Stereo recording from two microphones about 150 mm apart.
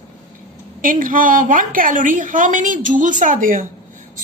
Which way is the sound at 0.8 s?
65° right (ahead or behind).